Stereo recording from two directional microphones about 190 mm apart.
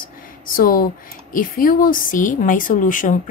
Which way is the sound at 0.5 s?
45° left (ahead or behind).